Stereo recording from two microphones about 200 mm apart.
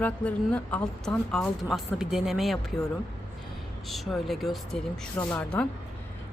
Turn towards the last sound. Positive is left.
turn(degrees=5)  # may be behind; listen again after turning